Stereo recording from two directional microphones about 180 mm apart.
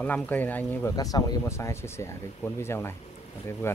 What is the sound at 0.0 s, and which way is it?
Speech, 10° left (ahead or behind).